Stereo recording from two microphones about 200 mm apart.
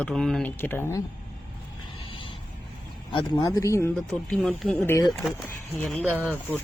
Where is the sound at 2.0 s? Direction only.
25° left (ahead or behind).